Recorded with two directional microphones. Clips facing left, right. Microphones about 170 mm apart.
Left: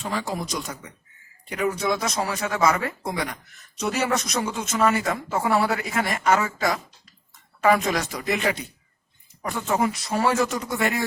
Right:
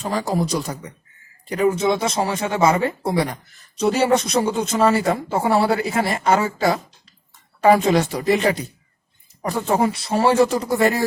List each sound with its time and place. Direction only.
0.0 s speech: 40° right (ahead or behind)